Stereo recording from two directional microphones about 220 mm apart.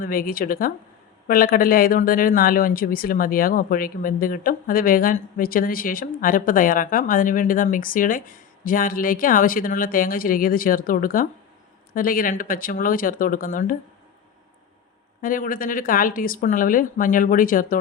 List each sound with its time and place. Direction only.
0.0 s speech: 40° left (ahead or behind)
15.2 s speech: 40° left (ahead or behind)